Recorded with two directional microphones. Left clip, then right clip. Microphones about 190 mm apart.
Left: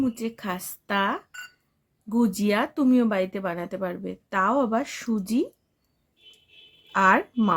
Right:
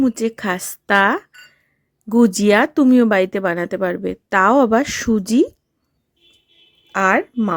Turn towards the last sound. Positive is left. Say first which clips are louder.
# right 3 dB
turn(degrees=-25)  # may be behind; listen again after turning